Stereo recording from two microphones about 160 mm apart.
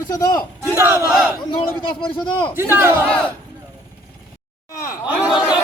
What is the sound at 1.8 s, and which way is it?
Speech, 30° left (ahead or behind).